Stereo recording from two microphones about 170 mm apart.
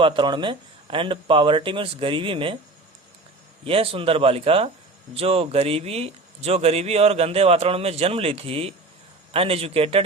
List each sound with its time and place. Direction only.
0.0 s speech: 30° right (ahead or behind)
3.6 s speech: 35° right (ahead or behind)